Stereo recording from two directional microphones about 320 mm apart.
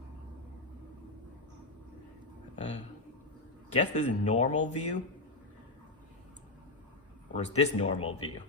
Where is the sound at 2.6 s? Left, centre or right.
Left.